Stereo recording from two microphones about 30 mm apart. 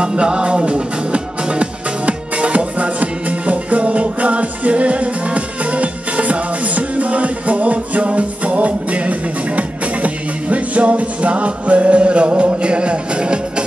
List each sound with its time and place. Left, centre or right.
0.0 s music: right